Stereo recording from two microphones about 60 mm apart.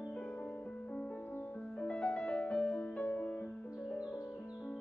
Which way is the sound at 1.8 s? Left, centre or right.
Left.